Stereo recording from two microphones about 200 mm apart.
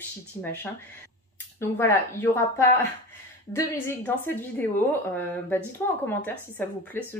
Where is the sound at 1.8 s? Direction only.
10° left (ahead or behind).